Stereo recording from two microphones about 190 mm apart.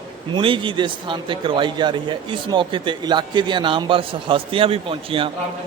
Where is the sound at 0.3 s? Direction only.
25° right (ahead or behind).